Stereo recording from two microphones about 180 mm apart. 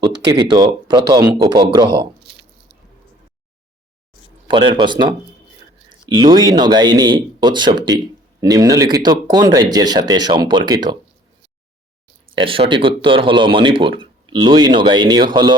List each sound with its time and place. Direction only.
0.0 s speech: 25° right (ahead or behind)
4.4 s speech: 25° right (ahead or behind)
12.3 s speech: 30° right (ahead or behind)